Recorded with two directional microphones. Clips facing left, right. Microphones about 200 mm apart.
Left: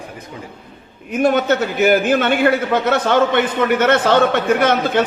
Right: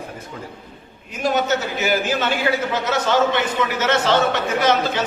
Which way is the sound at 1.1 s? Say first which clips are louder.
Left 5 dB; 55° left (ahead or behind).